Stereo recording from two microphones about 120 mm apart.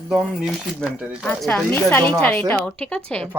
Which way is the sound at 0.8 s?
5° left (ahead or behind).